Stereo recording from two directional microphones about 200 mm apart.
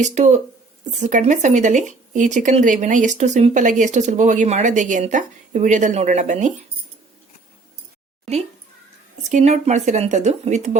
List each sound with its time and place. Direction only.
0.0 s speech: 35° right (ahead or behind)
9.3 s speech: 35° right (ahead or behind)